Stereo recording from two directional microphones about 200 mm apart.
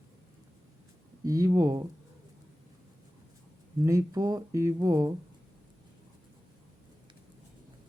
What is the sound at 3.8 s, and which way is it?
Speech, 15° right (ahead or behind).